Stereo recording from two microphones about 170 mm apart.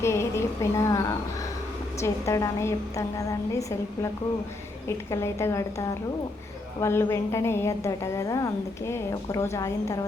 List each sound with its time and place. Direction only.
0.0 s a woman's voice: 15° left (ahead or behind)